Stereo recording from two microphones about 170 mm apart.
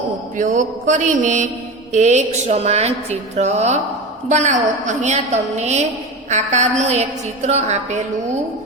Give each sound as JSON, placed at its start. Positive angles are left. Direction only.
{"t": 0.3, "sound": "a woman's voice", "side_deg": -45}